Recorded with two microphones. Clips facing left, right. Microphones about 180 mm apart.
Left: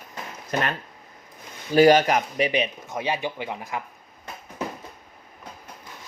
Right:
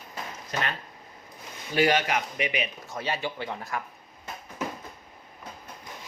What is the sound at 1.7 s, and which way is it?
Speech, 40° left (ahead or behind).